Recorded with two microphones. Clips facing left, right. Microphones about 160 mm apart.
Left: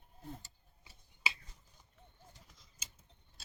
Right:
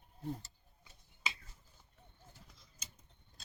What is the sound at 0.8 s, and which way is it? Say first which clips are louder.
Finger snapping: left 2 dB; 10° left (ahead or behind).